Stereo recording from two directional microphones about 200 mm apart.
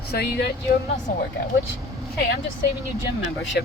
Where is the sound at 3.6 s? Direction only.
55° left (ahead or behind).